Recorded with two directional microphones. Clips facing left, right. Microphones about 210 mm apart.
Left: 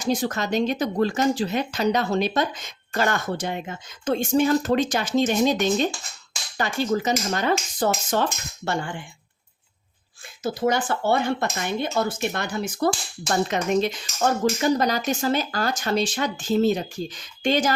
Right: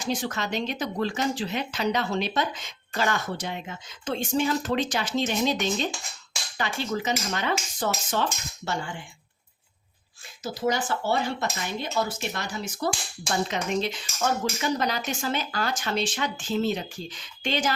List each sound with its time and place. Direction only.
0.0 s speech: 40° left (ahead or behind); by 9.0 s 55° left (ahead or behind)
10.4 s speech: 55° left (ahead or behind)